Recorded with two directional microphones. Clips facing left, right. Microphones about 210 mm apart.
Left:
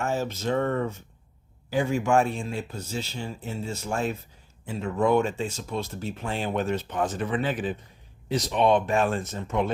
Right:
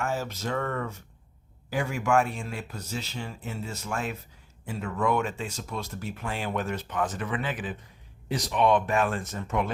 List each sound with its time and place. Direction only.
0.0 s speech: 25° left (ahead or behind)